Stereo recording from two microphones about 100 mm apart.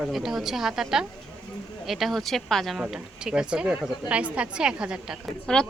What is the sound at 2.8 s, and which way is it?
A woman's voice, 10° right (ahead or behind).